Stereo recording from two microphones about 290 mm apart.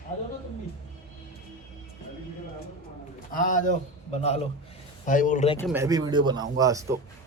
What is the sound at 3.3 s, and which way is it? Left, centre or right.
A man's voice, left.